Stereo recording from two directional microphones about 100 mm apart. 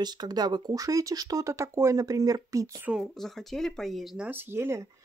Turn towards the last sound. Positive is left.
turn(degrees=-25)  # may be behind; listen again after turning